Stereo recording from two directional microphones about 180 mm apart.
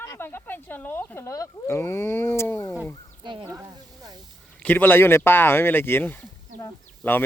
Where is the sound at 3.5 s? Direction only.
20° right (ahead or behind).